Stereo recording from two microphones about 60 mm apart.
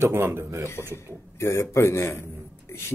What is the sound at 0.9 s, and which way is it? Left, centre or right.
A man's voice, left.